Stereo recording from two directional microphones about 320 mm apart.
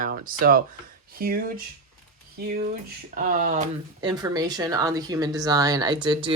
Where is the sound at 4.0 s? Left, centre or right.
Centre.